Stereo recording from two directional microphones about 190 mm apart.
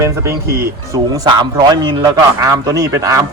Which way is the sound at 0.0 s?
15° right (ahead or behind).